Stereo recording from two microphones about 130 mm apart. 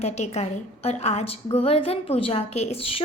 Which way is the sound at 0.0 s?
55° left (ahead or behind).